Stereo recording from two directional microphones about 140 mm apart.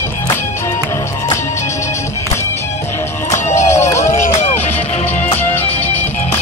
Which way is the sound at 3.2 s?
55° left (ahead or behind).